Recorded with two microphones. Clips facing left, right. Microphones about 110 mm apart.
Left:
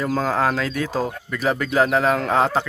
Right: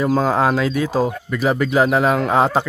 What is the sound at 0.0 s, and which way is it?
Speech, 15° right (ahead or behind).